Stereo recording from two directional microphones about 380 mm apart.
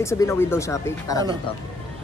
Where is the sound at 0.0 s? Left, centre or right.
Centre.